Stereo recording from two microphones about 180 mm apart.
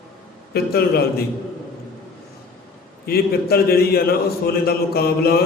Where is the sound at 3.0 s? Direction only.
60° left (ahead or behind).